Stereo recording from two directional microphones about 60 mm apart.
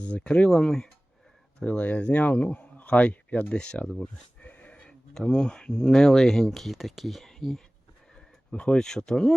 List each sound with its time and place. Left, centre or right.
0.0 s speech: centre
0.4 s speech: centre
1.5 s a man's voice: left
4.4 s a sound: left
5.7 s speech: centre